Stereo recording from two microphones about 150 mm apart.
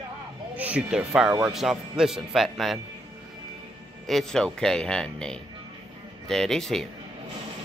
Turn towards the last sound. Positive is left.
turn(degrees=5)  # may be behind; listen again after turning